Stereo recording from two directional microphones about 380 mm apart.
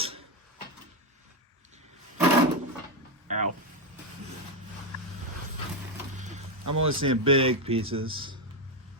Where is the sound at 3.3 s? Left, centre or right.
Centre.